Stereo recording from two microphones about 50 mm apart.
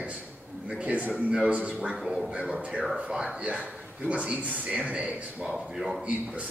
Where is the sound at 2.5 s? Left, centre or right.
Right.